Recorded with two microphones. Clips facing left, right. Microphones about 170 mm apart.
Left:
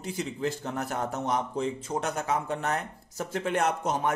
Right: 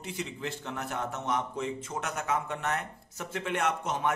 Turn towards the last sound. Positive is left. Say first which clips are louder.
# left 2 dB
turn(degrees=40)  # may be behind; listen again after turning